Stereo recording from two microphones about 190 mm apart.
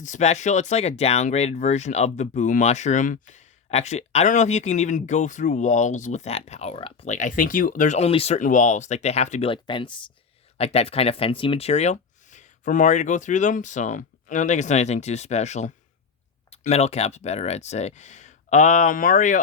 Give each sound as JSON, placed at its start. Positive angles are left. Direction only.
{"t": 0.0, "sound": "speech", "side_deg": 40}